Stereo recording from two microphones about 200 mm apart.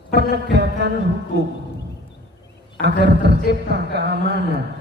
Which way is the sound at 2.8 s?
60° right (ahead or behind).